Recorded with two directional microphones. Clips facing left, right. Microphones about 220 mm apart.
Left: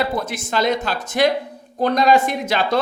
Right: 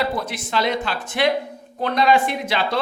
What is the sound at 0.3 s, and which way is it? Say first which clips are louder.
A man's voice: left 3 dB; 45° left (ahead or behind).